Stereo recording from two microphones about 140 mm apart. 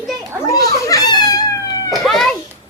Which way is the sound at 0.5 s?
25° left (ahead or behind).